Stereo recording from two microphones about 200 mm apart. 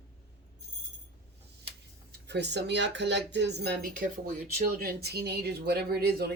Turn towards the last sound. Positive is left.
turn(degrees=-50)  # may be behind; listen again after turning